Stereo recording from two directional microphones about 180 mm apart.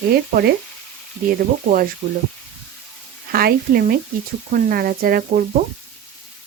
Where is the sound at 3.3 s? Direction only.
55° right (ahead or behind).